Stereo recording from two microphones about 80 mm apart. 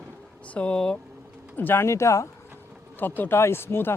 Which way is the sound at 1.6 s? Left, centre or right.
Left.